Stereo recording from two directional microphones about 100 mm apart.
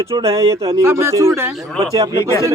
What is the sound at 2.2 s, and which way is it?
Speech, 30° left (ahead or behind).